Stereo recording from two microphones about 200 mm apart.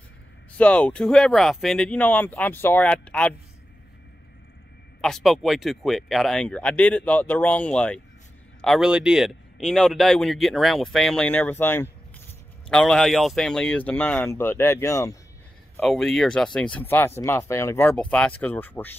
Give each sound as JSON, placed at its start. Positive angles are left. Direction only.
{"t": 0.6, "sound": "speech", "side_deg": 5}
{"t": 5.0, "sound": "a man's voice", "side_deg": 0}
{"t": 15.7, "sound": "a man's voice", "side_deg": 5}